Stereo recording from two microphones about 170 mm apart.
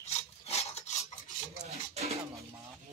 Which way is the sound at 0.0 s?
40° left (ahead or behind).